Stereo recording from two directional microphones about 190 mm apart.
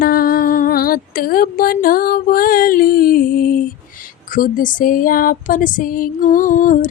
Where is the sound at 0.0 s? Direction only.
50° left (ahead or behind).